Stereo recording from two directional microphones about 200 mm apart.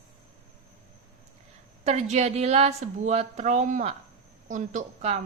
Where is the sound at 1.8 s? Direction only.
35° right (ahead or behind).